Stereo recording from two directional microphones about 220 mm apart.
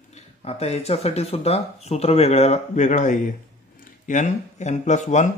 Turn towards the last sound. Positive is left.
turn(degrees=35)  # may be behind; listen again after turning